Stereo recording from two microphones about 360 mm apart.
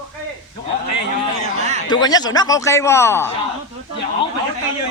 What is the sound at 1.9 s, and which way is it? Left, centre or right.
Speech, centre.